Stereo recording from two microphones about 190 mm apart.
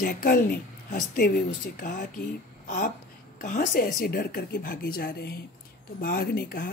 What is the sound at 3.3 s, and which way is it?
Speech, 45° left (ahead or behind).